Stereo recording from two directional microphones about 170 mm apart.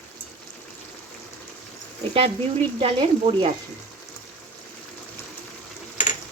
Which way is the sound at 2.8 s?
30° right (ahead or behind).